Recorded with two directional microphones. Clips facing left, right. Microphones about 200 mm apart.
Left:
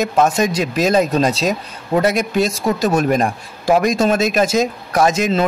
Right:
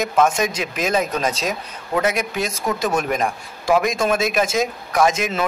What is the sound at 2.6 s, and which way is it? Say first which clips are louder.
Speech: left 5 dB; 30° left (ahead or behind).